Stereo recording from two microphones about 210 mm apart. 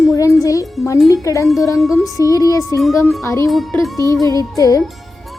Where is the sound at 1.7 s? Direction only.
Centre (ahead or behind).